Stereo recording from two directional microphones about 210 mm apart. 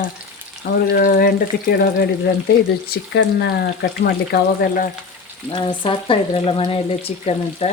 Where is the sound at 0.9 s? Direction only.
45° left (ahead or behind).